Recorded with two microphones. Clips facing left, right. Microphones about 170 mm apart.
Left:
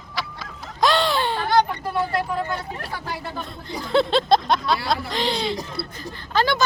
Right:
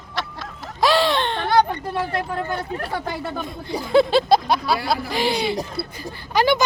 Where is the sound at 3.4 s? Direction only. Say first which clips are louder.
Right 4 dB; 10° right (ahead or behind).